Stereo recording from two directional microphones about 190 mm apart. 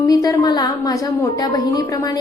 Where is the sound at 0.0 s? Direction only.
20° left (ahead or behind).